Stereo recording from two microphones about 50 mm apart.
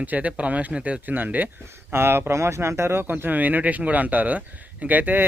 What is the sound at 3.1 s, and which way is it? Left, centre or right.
Speech, right.